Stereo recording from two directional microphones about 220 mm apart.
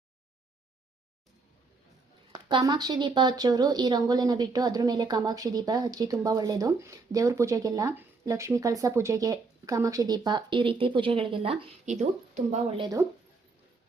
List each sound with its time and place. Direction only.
2.5 s a woman's voice: 20° right (ahead or behind)